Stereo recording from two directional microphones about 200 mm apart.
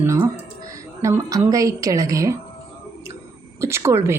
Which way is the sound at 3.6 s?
15° right (ahead or behind).